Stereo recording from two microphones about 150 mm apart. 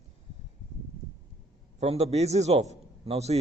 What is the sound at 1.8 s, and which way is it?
A man's voice, 45° right (ahead or behind).